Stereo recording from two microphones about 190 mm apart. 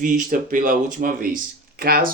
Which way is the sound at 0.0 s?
45° right (ahead or behind).